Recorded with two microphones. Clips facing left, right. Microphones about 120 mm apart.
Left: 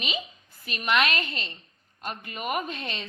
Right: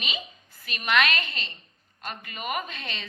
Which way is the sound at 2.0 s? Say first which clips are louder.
Left 2 dB; 45° left (ahead or behind).